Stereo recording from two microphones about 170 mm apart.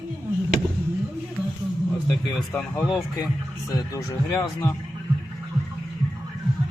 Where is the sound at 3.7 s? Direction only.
20° left (ahead or behind).